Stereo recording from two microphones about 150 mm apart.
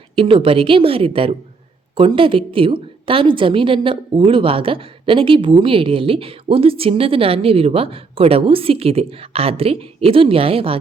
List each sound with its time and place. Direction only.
0.2 s a woman's voice: 35° right (ahead or behind)